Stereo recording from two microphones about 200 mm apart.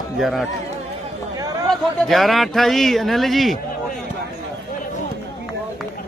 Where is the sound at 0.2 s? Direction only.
Centre (ahead or behind).